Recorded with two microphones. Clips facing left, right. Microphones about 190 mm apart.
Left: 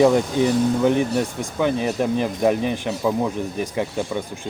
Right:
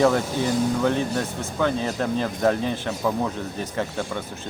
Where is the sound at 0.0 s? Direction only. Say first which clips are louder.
Left 4 dB; 15° left (ahead or behind).